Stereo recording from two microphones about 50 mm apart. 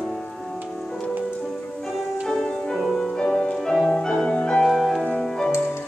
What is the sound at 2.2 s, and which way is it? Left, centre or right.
Music, centre.